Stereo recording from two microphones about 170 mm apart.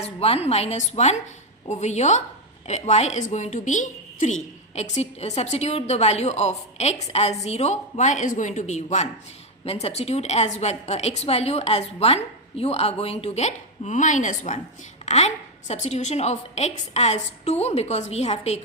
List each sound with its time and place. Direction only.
0.0 s a woman's voice: 35° left (ahead or behind)